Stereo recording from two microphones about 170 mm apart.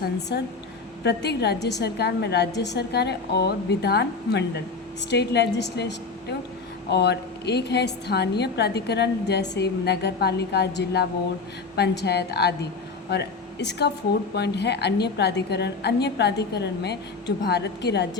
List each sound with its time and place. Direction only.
0.0 s a woman's voice: 80° left